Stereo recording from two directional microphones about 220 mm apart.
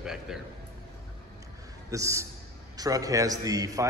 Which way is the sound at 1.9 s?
15° right (ahead or behind).